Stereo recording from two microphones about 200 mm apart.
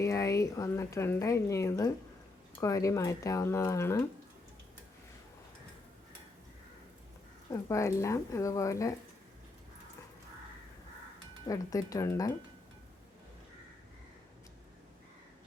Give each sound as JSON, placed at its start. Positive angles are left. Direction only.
{"t": 0.0, "sound": "a woman's voice", "side_deg": 15}
{"t": 7.5, "sound": "a woman's voice", "side_deg": 15}
{"t": 11.4, "sound": "a woman's voice", "side_deg": 15}